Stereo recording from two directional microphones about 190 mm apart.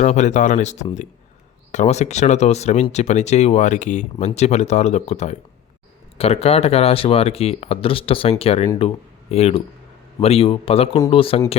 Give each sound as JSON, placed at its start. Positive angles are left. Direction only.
{"t": 0.0, "sound": "speech", "side_deg": 40}